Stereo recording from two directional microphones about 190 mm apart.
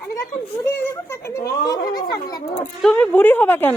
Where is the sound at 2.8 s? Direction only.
5° left (ahead or behind).